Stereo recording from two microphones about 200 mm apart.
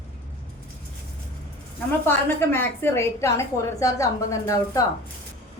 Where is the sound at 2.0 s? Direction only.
10° left (ahead or behind).